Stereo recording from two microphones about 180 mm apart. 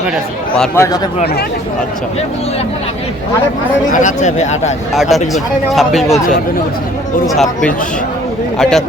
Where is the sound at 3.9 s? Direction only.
45° left (ahead or behind).